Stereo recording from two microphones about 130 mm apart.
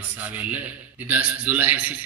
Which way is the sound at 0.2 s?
10° right (ahead or behind).